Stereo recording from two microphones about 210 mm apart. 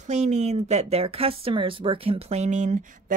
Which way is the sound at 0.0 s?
35° right (ahead or behind).